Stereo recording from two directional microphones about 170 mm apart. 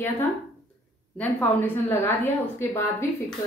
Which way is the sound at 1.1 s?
10° left (ahead or behind).